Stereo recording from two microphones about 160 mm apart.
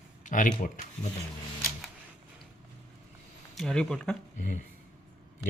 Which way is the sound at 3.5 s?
5° left (ahead or behind).